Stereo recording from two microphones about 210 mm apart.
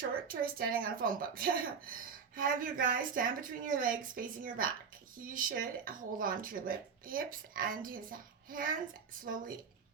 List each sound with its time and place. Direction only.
0.3 s speech: 45° right (ahead or behind)